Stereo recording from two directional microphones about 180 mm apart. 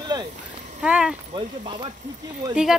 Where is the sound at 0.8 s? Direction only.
5° right (ahead or behind).